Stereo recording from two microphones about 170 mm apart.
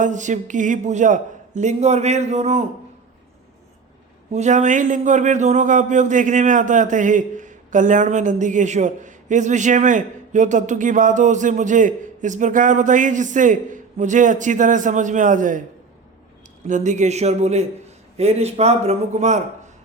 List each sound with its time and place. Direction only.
0.0 s a man's voice: 45° right (ahead or behind)
4.3 s a man's voice: 45° right (ahead or behind)
16.6 s a man's voice: 45° right (ahead or behind)